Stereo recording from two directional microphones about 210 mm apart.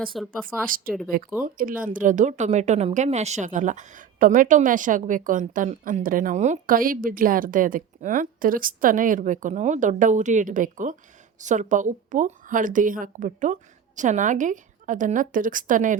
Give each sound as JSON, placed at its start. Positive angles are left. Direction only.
{"t": 0.0, "sound": "speech", "side_deg": 0}
{"t": 0.4, "sound": "speech", "side_deg": -40}